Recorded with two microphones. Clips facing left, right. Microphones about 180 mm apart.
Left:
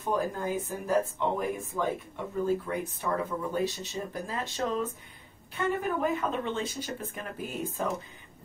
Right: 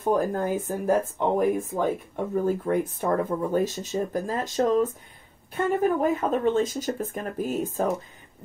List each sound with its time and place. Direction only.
0.0 s speech: 45° right (ahead or behind)